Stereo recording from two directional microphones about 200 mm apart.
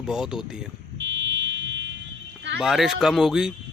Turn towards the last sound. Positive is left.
turn(degrees=-5)  # may be behind; listen again after turning